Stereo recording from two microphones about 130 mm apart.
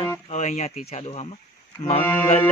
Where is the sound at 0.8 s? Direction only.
50° left (ahead or behind).